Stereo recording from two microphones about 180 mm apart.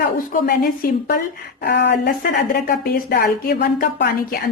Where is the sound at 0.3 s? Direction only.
50° left (ahead or behind).